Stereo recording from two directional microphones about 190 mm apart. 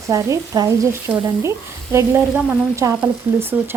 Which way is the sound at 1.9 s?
10° right (ahead or behind).